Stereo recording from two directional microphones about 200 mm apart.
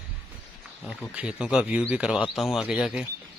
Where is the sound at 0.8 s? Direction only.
5° right (ahead or behind).